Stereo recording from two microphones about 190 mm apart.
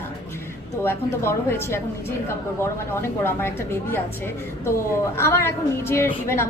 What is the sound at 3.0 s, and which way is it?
A woman's voice, 10° left (ahead or behind).